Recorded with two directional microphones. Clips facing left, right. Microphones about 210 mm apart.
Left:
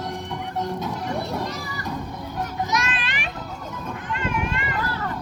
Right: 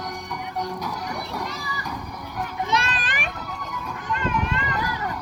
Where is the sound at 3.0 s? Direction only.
50° right (ahead or behind).